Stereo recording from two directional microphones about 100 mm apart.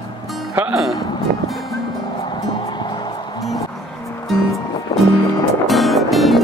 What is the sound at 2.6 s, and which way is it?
Music, 50° left (ahead or behind).